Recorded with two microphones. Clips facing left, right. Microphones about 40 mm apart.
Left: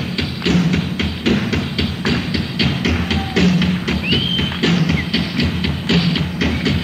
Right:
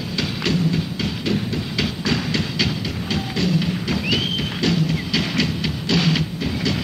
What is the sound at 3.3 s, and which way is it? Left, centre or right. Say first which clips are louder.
Music: left 6 dB; left.